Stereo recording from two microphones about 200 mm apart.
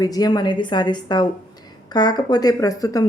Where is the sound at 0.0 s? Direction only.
20° left (ahead or behind).